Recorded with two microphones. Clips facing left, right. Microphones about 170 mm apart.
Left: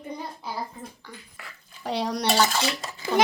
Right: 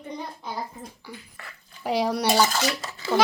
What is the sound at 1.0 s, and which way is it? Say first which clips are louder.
Speech: right 3 dB; 10° right (ahead or behind).